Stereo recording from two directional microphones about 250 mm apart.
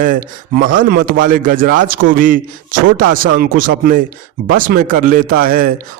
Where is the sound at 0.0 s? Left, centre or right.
Right.